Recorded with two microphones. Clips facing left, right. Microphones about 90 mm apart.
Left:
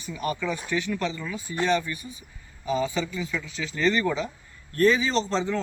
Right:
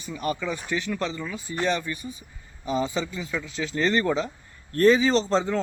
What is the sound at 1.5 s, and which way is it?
A man's voice, 35° right (ahead or behind).